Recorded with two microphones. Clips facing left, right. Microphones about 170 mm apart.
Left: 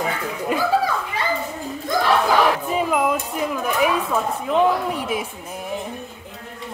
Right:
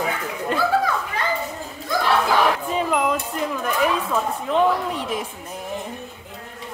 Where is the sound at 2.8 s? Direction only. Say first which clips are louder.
Left 1 dB; 5° left (ahead or behind).